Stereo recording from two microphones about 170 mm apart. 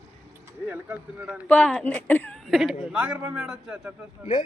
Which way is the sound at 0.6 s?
10° right (ahead or behind).